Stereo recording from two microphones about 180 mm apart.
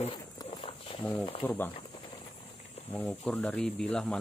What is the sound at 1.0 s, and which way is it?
Speech, 10° left (ahead or behind).